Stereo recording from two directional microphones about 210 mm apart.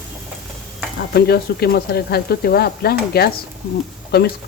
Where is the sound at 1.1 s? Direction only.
50° left (ahead or behind).